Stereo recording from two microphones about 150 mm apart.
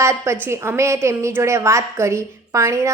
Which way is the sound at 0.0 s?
20° right (ahead or behind).